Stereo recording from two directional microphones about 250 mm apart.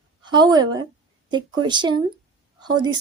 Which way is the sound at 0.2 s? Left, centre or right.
Centre.